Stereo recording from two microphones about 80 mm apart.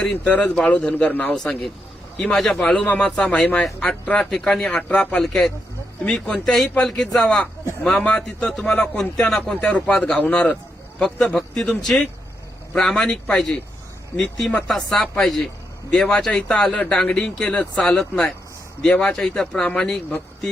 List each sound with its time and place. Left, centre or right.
0.0 s speech: centre
1.3 s speech: centre
4.8 s speech: centre
5.2 s speech: centre